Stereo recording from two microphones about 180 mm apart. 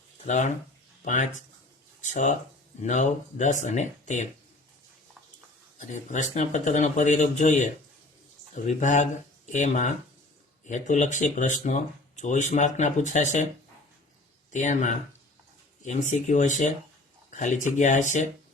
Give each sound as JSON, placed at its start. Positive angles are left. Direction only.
{"t": 0.3, "sound": "speech", "side_deg": 40}
{"t": 5.9, "sound": "speech", "side_deg": 45}
{"t": 14.5, "sound": "speech", "side_deg": 45}